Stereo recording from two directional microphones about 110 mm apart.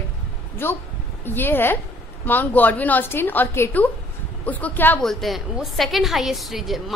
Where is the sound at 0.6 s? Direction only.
20° left (ahead or behind).